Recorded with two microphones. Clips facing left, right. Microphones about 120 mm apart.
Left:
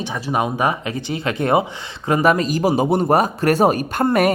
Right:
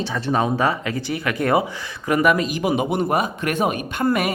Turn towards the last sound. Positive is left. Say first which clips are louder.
# left 4 dB
turn(degrees=45)  # may be behind; listen again after turning